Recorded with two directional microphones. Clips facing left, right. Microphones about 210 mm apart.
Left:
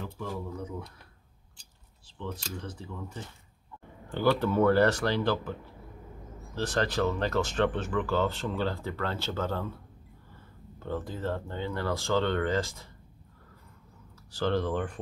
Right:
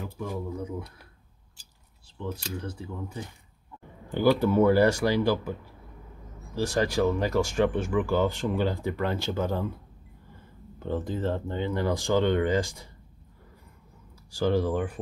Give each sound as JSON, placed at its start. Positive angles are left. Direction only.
{"t": 0.0, "sound": "speech", "side_deg": -10}
{"t": 2.1, "sound": "speech", "side_deg": -5}
{"t": 10.8, "sound": "speech", "side_deg": -15}
{"t": 14.3, "sound": "speech", "side_deg": -10}